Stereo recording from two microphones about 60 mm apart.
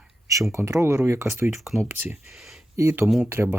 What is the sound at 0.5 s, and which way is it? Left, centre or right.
Speech, right.